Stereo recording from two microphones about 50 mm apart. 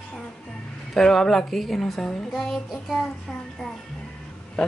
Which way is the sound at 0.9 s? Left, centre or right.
Centre.